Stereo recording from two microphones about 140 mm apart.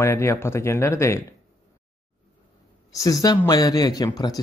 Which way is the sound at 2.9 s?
25° left (ahead or behind).